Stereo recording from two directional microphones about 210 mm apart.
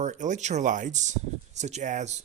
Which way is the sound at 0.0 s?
35° right (ahead or behind).